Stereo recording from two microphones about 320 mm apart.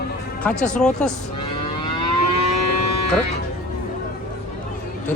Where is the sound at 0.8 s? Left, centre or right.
Centre.